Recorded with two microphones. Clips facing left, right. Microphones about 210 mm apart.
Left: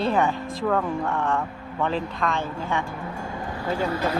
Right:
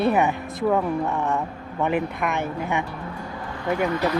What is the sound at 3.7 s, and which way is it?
Speech, 30° left (ahead or behind).